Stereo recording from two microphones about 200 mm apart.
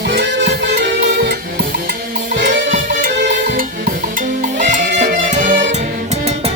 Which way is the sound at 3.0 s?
45° right (ahead or behind).